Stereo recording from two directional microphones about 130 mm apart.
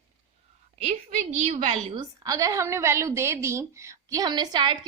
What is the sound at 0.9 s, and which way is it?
Speech, 55° right (ahead or behind).